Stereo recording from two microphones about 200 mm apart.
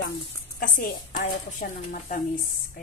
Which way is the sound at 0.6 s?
45° left (ahead or behind).